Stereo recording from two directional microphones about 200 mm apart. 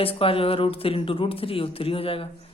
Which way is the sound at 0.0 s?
30° left (ahead or behind).